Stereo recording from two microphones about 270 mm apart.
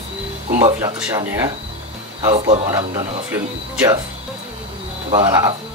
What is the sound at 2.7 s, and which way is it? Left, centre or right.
Speech, centre.